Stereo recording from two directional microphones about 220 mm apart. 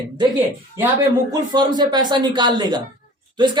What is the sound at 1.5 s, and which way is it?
A man's voice, 20° right (ahead or behind).